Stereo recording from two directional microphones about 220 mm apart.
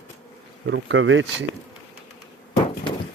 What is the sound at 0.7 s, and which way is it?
Speech, 60° right (ahead or behind).